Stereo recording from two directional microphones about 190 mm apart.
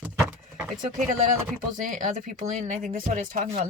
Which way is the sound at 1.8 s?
45° right (ahead or behind).